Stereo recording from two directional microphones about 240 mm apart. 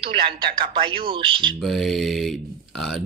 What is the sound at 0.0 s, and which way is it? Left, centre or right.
Speech, right.